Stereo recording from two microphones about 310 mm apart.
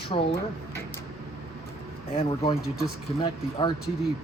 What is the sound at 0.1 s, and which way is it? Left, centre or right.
Speech, centre.